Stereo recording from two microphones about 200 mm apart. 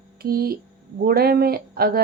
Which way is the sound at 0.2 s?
50° right (ahead or behind).